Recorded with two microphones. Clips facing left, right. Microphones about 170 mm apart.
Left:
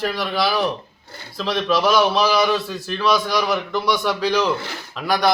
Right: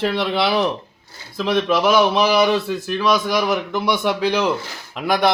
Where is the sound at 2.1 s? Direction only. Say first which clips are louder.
Right 2 dB; 20° right (ahead or behind).